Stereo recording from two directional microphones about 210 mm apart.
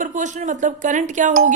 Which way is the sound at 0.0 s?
35° right (ahead or behind).